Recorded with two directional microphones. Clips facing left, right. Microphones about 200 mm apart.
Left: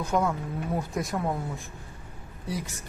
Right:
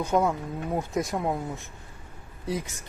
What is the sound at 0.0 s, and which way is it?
Speech, 20° right (ahead or behind).